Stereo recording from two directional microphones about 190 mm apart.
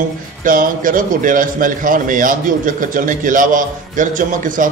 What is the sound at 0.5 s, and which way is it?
A man's voice, 45° right (ahead or behind).